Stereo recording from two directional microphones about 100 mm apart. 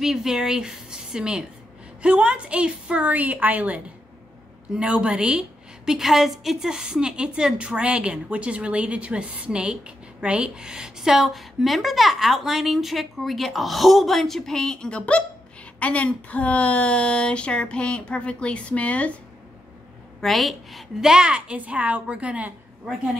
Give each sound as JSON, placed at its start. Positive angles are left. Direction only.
{"t": 0.0, "sound": "a woman's voice", "side_deg": -5}
{"t": 20.2, "sound": "a woman's voice", "side_deg": 0}